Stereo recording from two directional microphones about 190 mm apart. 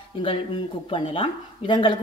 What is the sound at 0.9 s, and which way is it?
Speech, 25° left (ahead or behind).